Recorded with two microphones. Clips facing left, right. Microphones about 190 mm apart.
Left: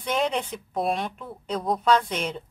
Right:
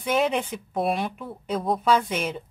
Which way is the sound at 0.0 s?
5° right (ahead or behind).